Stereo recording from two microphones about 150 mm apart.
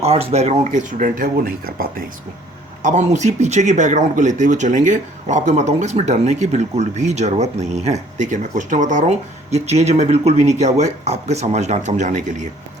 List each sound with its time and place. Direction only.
0.0 s speech: 45° right (ahead or behind); by 2.0 s 75° right (ahead or behind)
2.8 s speech: 55° right (ahead or behind)